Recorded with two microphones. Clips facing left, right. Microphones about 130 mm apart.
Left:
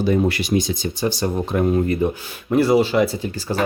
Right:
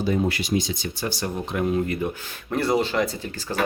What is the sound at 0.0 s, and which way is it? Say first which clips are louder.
Speech: left 5 dB; 65° left (ahead or behind).